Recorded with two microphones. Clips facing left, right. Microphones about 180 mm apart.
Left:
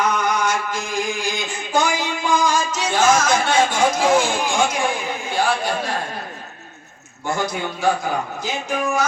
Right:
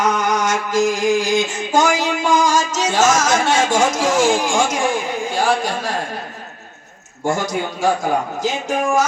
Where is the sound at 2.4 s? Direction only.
90° right.